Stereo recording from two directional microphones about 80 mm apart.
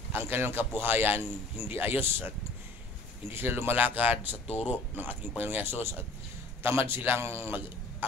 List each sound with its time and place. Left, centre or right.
0.1 s a man's voice: right